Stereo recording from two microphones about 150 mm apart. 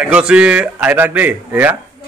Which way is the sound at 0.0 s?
5° right (ahead or behind).